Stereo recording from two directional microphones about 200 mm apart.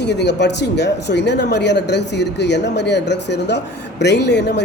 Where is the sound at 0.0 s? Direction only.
55° left (ahead or behind).